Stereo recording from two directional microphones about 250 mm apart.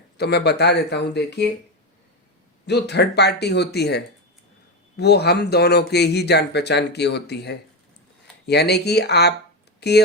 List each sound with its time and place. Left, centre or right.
0.2 s speech: left
2.6 s speech: left